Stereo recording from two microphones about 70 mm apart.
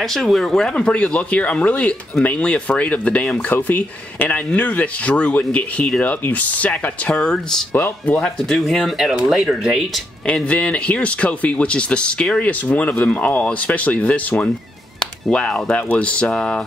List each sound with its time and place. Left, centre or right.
0.0 s speech: centre; by 1.8 s left
1.8 s speech: centre
8.5 s speech: centre
10.2 s speech: centre